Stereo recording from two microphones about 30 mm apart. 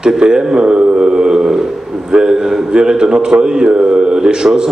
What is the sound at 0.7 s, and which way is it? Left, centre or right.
Mantra, right.